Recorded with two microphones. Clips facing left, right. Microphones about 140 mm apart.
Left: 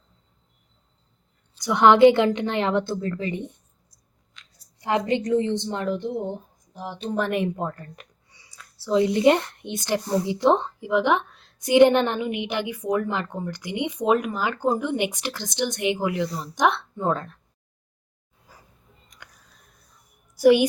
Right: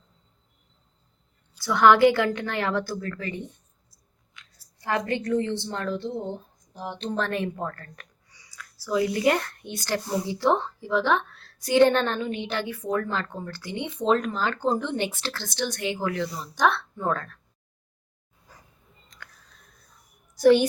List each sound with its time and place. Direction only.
1.5 s a woman's voice: 20° left (ahead or behind)
4.8 s a woman's voice: 20° left (ahead or behind)
6.7 s a woman's voice: 5° left (ahead or behind); by 17.4 s 20° left (ahead or behind)
18.5 s dog: 10° left (ahead or behind)
19.1 s a sound: 15° left (ahead or behind)
20.3 s a woman's voice: 10° left (ahead or behind)